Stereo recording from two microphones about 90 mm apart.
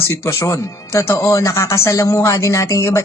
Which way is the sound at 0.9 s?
30° left (ahead or behind).